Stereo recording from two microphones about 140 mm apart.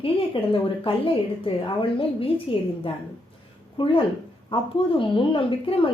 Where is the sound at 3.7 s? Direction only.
40° left (ahead or behind).